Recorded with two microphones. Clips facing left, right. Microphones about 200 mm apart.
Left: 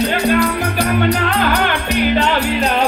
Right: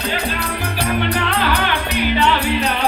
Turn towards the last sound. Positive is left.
turn(degrees=50)  # may be behind; listen again after turning